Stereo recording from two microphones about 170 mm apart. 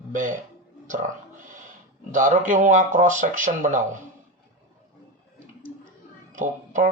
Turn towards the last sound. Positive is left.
turn(degrees=-50)  # may be behind; listen again after turning